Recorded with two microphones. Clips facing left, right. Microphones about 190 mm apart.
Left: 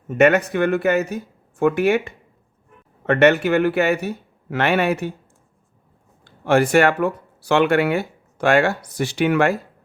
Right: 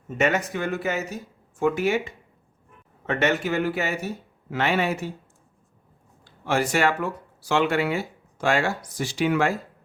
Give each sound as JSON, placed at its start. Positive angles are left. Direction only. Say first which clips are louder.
{"t": 0.2, "sound": "speech", "louder": "left 8 dB", "side_deg": 65}
{"t": 6.2, "sound": "speech", "louder": "left 7 dB", "side_deg": 60}